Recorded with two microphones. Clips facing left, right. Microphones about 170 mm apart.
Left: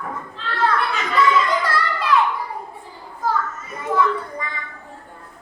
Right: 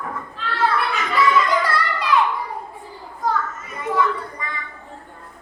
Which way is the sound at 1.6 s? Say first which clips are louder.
Even; centre (ahead or behind).